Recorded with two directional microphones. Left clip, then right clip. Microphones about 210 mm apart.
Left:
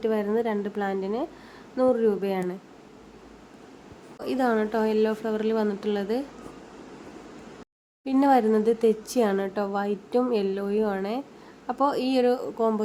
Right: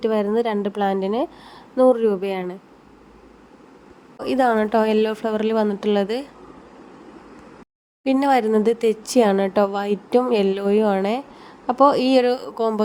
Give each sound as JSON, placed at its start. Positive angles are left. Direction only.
{"t": 0.0, "sound": "speech", "side_deg": -20}
{"t": 4.2, "sound": "speech", "side_deg": -25}
{"t": 8.0, "sound": "speech", "side_deg": -30}